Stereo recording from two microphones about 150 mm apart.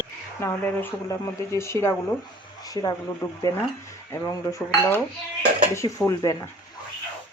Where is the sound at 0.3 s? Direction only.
15° left (ahead or behind).